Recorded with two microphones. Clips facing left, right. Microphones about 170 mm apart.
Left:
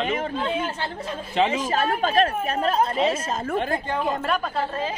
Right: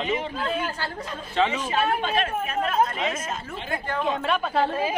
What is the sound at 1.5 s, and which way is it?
Speech, 40° left (ahead or behind).